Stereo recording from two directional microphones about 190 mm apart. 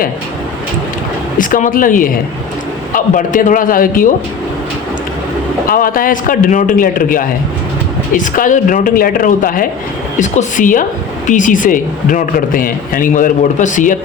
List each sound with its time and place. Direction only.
1.4 s a man's voice: 45° left (ahead or behind)
5.6 s a man's voice: 50° left (ahead or behind)